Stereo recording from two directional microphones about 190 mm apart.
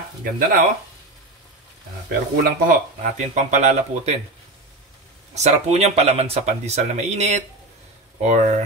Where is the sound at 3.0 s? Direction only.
40° right (ahead or behind).